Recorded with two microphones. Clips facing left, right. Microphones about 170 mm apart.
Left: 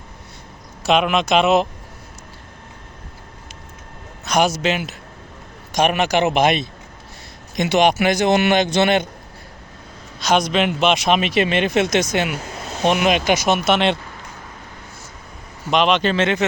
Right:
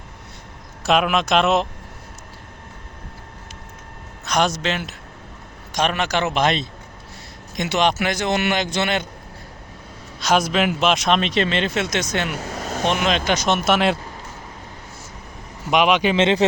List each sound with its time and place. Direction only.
0.9 s a man's voice: centre (ahead or behind)
4.3 s a man's voice: 5° left (ahead or behind)
10.2 s a man's voice: 5° right (ahead or behind)
13.7 s a man's voice: 5° right (ahead or behind)
15.7 s speech: 10° right (ahead or behind)
16.1 s speech: 25° right (ahead or behind)